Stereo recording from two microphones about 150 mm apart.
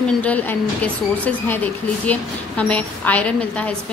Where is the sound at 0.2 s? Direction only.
10° left (ahead or behind).